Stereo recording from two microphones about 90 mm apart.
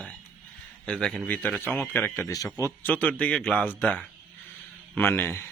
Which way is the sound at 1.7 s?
20° left (ahead or behind).